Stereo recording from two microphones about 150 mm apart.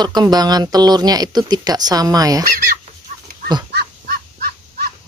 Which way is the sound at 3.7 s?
90° right.